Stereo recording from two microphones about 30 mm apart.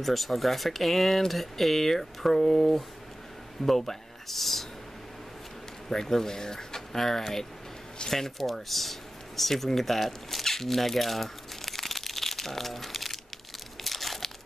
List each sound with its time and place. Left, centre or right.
0.0 s speech: centre
5.9 s speech: centre
9.4 s a sound: centre
13.8 s crumpling: centre